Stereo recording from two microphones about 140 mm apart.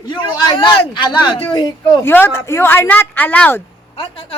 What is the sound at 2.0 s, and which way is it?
A woman's voice, 15° left (ahead or behind).